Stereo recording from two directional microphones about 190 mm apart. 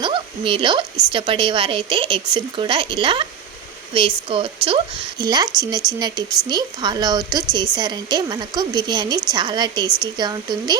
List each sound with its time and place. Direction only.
0.0 s a woman's voice: 25° right (ahead or behind)